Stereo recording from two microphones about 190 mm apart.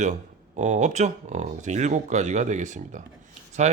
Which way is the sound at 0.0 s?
40° right (ahead or behind).